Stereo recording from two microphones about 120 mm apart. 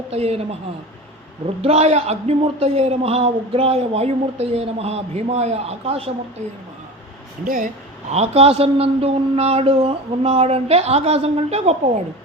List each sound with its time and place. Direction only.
0.1 s a man's voice: 60° right (ahead or behind)
1.6 s a man's voice: 60° right (ahead or behind)
8.1 s a man's voice: 60° right (ahead or behind)